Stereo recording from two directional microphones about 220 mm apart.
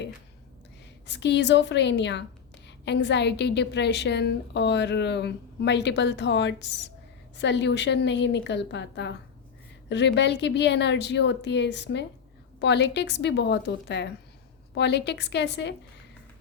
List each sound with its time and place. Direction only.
1.0 s a woman's voice: 50° left (ahead or behind)